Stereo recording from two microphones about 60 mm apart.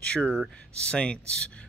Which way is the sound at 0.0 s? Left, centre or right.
Centre.